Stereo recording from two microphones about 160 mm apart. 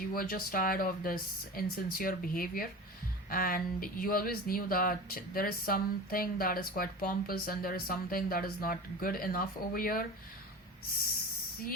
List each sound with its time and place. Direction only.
0.1 s speech: 65° left (ahead or behind)